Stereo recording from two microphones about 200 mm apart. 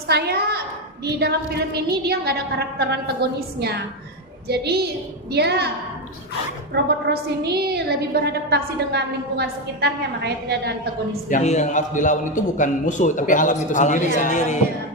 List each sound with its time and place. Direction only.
0.1 s a woman's voice: 55° right (ahead or behind)
6.8 s a woman's voice: 55° right (ahead or behind)
11.3 s a man's voice: 35° left (ahead or behind)